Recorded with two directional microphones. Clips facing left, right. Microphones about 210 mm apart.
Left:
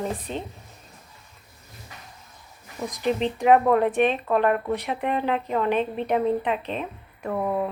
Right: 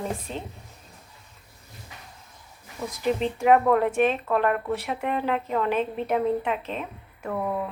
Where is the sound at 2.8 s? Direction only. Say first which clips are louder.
Left 1 dB; 15° left (ahead or behind).